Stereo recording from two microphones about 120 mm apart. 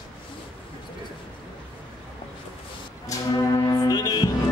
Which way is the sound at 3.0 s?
30° left (ahead or behind).